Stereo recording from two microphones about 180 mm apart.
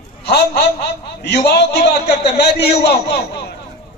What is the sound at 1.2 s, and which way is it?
A man's voice, 65° left (ahead or behind).